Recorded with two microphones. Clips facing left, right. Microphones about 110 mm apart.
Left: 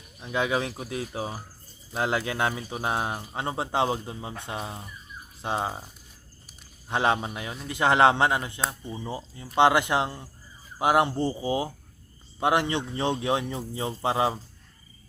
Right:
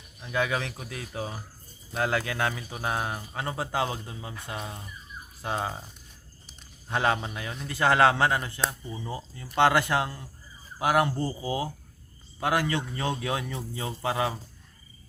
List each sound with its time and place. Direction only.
0.2 s speech: 20° left (ahead or behind)
6.8 s a man's voice: 20° left (ahead or behind)